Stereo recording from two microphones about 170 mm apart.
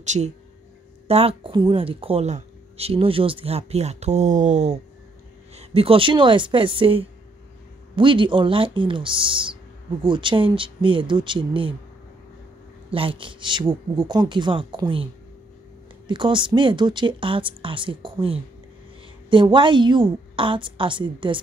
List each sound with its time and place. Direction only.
0.0 s speech: 45° right (ahead or behind)
12.9 s speech: 30° right (ahead or behind)
16.1 s speech: 30° right (ahead or behind)